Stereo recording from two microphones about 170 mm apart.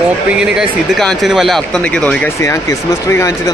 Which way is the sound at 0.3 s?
5° right (ahead or behind).